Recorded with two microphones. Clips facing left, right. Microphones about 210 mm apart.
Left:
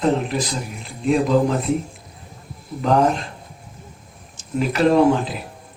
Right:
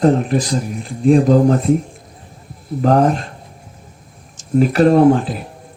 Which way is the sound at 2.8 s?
45° right (ahead or behind).